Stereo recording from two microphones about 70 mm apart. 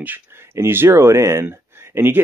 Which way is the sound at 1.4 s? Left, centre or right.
Right.